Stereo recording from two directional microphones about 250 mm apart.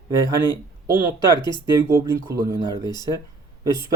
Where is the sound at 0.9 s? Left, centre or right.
Centre.